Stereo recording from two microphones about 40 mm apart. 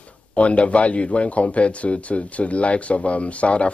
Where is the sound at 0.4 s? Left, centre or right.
Left.